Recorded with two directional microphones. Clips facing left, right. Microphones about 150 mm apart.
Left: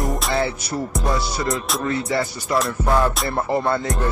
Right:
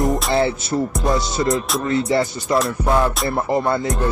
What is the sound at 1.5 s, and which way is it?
Music, centre (ahead or behind).